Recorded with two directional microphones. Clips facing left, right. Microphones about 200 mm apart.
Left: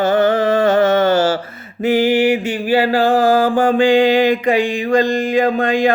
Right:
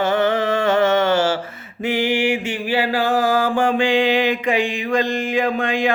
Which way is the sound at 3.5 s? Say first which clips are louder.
Left 5 dB; 35° left (ahead or behind).